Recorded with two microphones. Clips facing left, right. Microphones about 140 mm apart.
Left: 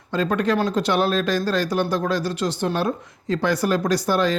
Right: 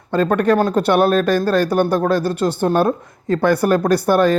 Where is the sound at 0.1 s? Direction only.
55° right (ahead or behind).